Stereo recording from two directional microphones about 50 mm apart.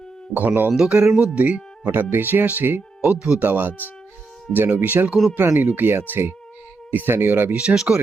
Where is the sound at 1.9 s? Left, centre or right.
Right.